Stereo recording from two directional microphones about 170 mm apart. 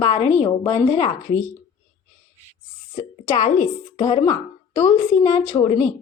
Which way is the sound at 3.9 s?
30° left (ahead or behind).